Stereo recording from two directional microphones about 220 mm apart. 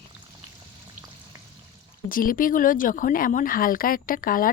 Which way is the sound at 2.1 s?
40° left (ahead or behind).